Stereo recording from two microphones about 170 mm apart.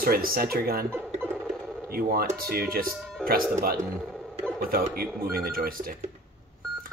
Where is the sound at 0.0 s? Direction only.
60° right (ahead or behind).